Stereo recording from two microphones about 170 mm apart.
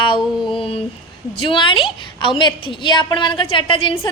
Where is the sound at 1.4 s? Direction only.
30° left (ahead or behind).